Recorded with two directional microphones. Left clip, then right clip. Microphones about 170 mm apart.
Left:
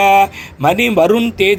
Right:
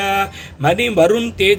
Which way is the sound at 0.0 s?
15° left (ahead or behind).